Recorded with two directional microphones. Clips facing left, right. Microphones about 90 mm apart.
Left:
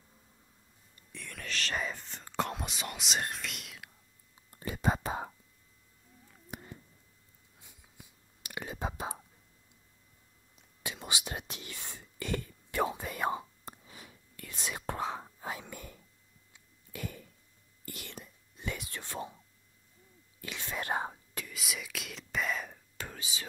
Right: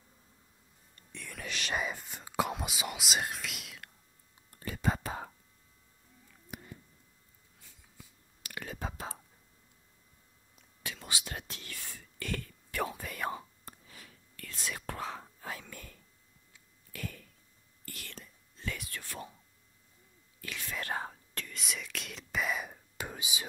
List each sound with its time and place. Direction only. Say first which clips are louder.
0.9 s whispering: even; centre (ahead or behind)
1.4 s speech: even; 15° right (ahead or behind)
4.5 s whispering: left 2 dB; 20° left (ahead or behind)
6.5 s a sound: left 1 dB; 35° left (ahead or behind)
7.6 s whispering: even; 20° left (ahead or behind)
10.8 s whispering: left 2 dB; 20° left (ahead or behind)
16.5 s a sound: left 3 dB; 20° left (ahead or behind)
17.8 s whispering: left 3 dB; 20° left (ahead or behind)
20.3 s whispering: left 1 dB; 20° left (ahead or behind)
21.5 s whispering: even; 5° left (ahead or behind); by 23.4 s 15° right (ahead or behind)